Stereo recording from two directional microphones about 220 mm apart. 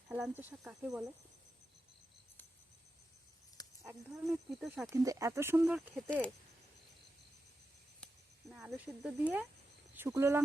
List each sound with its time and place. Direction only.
0.1 s speech: 5° right (ahead or behind)
3.6 s a sound: 15° left (ahead or behind)
4.6 s speech: centre (ahead or behind)
4.9 s speech: 15° right (ahead or behind); by 6.3 s centre (ahead or behind)
8.0 s speech: centre (ahead or behind)